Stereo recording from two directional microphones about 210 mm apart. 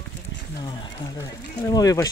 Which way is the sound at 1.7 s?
15° left (ahead or behind).